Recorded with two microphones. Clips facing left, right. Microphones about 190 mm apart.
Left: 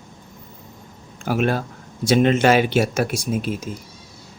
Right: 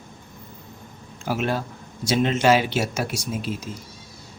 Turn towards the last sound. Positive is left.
turn(degrees=55)  # may be behind; listen again after turning